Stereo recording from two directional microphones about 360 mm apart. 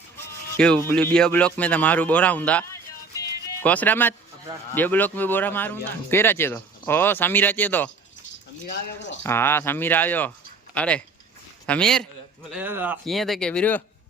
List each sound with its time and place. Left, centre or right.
0.5 s speech: centre
3.2 s music: centre
4.7 s speech: centre
8.7 s speech: left
9.2 s speech: centre